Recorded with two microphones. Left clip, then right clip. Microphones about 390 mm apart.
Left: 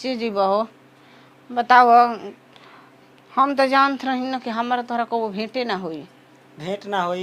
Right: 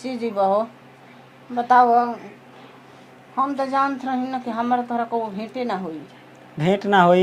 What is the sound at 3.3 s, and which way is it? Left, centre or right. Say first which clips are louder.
Speech: left 4 dB; left.